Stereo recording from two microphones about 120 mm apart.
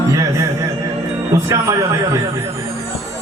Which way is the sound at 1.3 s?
25° right (ahead or behind).